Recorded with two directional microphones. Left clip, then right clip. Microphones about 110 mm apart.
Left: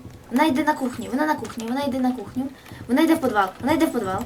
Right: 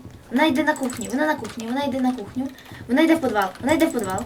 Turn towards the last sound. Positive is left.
turn(degrees=30)  # may be behind; listen again after turning